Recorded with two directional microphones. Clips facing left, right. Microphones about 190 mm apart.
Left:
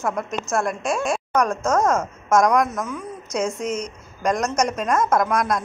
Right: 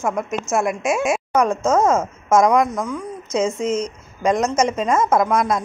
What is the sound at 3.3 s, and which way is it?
A woman's voice, centre (ahead or behind).